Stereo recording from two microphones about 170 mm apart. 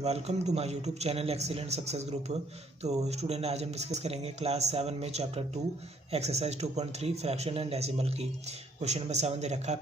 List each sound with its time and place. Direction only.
0.0 s speech: 40° right (ahead or behind)